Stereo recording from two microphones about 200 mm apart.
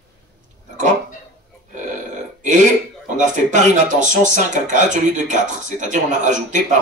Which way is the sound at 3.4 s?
40° right (ahead or behind).